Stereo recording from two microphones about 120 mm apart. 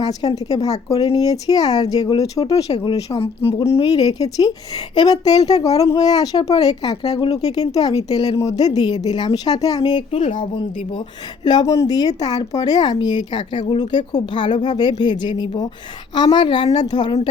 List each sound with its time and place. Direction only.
0.0 s speech: 30° left (ahead or behind)
3.2 s speech: 55° left (ahead or behind)
4.0 s speech: 30° left (ahead or behind)
10.1 s speech: 75° left (ahead or behind)
11.4 s speech: 35° left (ahead or behind)